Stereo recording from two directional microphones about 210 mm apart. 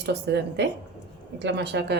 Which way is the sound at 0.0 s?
55° right (ahead or behind).